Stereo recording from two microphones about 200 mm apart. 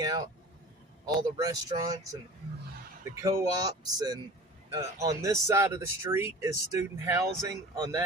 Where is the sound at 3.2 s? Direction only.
15° right (ahead or behind).